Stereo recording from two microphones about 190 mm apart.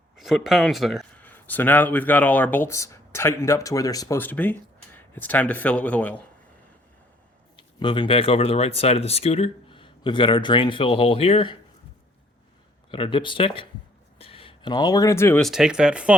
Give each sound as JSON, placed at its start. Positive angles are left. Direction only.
{"t": 0.2, "sound": "speech", "side_deg": 0}
{"t": 1.2, "sound": "speech", "side_deg": 10}
{"t": 7.5, "sound": "speech", "side_deg": 25}
{"t": 12.9, "sound": "speech", "side_deg": 25}
{"t": 15.4, "sound": "speech", "side_deg": 0}